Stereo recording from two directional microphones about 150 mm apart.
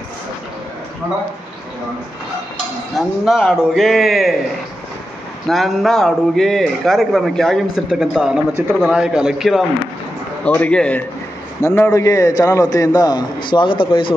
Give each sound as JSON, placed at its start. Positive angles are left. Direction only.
{"t": 3.0, "sound": "a man's voice", "side_deg": 0}
{"t": 5.5, "sound": "a man's voice", "side_deg": 0}
{"t": 10.4, "sound": "a man's voice", "side_deg": 10}